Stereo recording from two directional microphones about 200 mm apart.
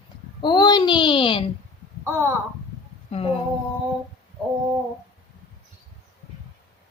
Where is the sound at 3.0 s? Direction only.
30° left (ahead or behind).